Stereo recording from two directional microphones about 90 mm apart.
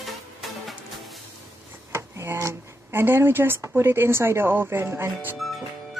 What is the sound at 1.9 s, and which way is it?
Speech, 30° right (ahead or behind).